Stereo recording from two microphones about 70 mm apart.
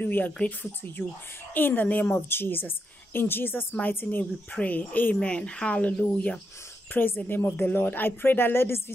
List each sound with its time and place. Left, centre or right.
0.0 s a woman's voice: left